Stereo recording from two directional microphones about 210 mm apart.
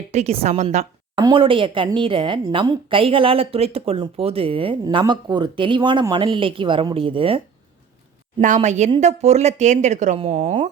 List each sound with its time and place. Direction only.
0.1 s a woman's voice: 30° right (ahead or behind)
8.4 s speech: 35° right (ahead or behind)